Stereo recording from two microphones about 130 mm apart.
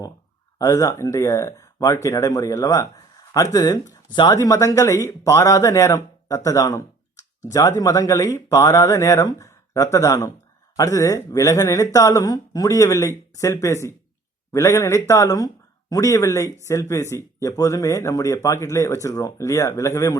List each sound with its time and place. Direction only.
0.6 s speech: 25° left (ahead or behind)